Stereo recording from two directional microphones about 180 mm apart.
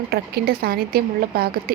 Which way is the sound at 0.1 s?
60° right (ahead or behind).